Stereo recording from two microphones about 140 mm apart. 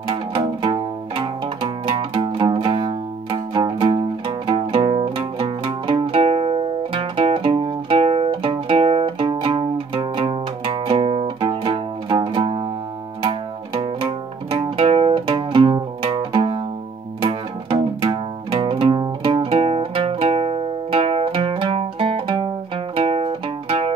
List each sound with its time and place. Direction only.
0.1 s music: 40° right (ahead or behind)